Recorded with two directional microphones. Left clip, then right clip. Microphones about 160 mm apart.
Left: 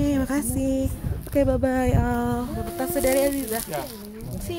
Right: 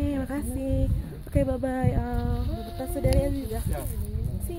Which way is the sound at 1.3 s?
20° left (ahead or behind).